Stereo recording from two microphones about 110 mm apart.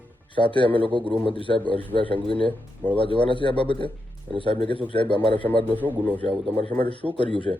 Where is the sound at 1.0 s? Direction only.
15° left (ahead or behind).